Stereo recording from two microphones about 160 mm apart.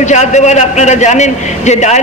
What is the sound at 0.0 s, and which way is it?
A man's voice, 45° left (ahead or behind).